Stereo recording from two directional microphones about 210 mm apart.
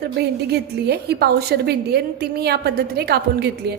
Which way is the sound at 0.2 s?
50° right (ahead or behind).